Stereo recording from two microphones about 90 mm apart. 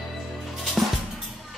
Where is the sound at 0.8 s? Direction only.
Centre (ahead or behind).